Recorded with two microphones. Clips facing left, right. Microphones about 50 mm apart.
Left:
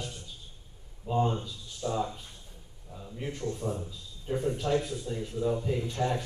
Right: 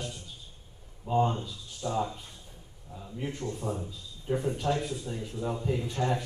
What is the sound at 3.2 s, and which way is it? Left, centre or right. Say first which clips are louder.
A man's voice: left 1 dB; centre.